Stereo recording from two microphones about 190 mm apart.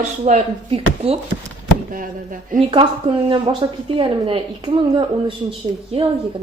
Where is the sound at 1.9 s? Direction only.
45° right (ahead or behind).